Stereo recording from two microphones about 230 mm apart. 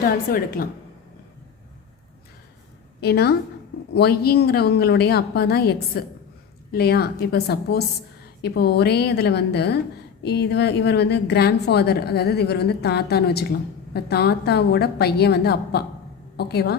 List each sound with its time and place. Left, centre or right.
0.0 s a woman's voice: left
3.0 s a woman's voice: left